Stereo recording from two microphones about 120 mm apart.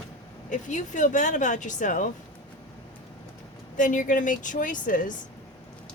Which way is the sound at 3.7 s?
90° left.